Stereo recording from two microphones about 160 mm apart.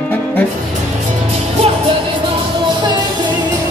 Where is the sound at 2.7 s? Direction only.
30° right (ahead or behind).